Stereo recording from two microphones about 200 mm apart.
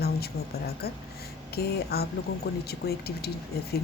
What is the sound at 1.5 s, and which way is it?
A woman's voice, 50° left (ahead or behind).